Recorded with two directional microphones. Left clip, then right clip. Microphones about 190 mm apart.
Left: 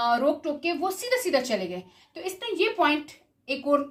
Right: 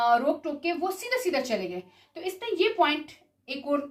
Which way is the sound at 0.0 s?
25° left (ahead or behind).